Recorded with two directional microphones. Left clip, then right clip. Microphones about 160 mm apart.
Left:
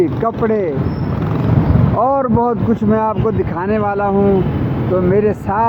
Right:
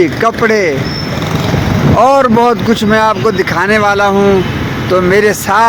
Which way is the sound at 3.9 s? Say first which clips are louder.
Right 7 dB; 40° right (ahead or behind).